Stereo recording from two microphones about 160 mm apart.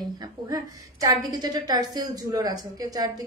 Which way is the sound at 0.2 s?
25° right (ahead or behind).